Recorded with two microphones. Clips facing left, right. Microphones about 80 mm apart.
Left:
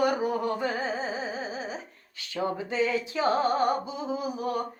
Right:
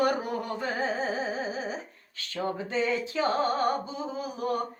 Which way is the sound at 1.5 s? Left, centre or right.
Centre.